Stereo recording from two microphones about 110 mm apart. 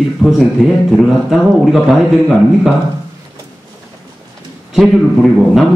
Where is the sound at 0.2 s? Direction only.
Centre (ahead or behind).